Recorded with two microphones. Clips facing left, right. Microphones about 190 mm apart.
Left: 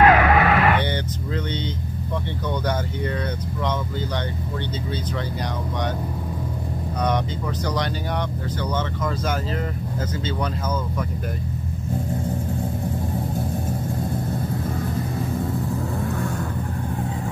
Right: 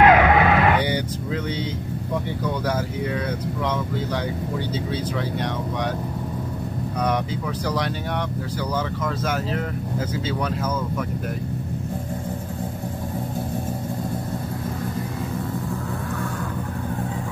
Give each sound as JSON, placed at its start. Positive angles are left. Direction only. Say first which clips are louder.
{"t": 0.0, "sound": "music", "louder": "right 1 dB", "side_deg": -20}